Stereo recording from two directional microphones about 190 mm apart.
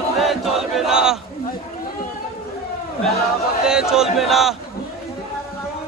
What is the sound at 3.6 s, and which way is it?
Speech, 5° right (ahead or behind).